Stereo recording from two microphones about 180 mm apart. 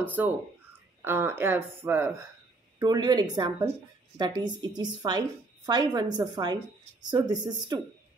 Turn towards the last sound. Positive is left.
turn(degrees=-25)  # may be behind; listen again after turning